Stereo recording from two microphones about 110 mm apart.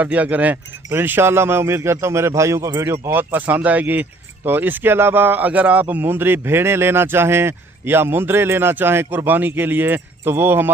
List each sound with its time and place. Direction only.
0.0 s speech: 15° right (ahead or behind)